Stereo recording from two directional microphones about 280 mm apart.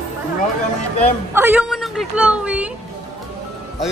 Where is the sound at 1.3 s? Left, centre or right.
Centre.